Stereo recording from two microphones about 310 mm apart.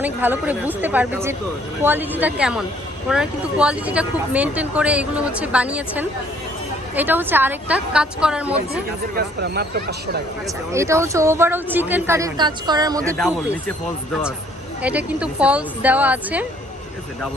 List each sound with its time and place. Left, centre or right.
0.0 s speech: centre
9.1 s speech: right
10.4 s speech: centre
13.1 s speech: centre
14.8 s speech: centre